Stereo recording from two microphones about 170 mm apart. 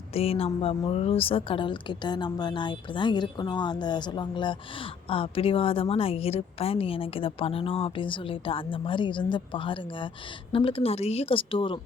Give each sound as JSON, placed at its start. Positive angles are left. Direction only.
{"t": 0.1, "sound": "speech", "side_deg": 35}